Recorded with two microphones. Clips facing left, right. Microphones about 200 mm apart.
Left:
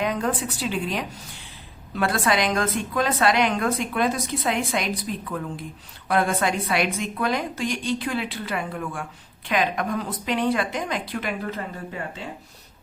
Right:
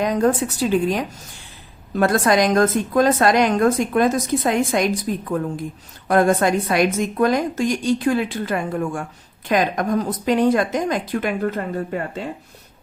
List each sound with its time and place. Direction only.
0.0 s a woman's voice: 40° right (ahead or behind)